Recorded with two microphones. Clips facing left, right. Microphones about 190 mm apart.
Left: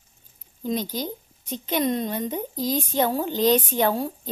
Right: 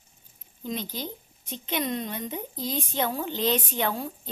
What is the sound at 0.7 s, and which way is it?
A woman's voice, 40° left (ahead or behind).